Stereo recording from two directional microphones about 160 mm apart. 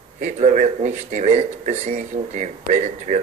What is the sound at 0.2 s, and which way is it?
Speech, 45° right (ahead or behind).